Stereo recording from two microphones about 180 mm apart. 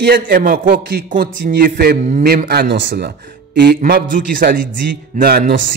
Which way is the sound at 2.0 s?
40° right (ahead or behind).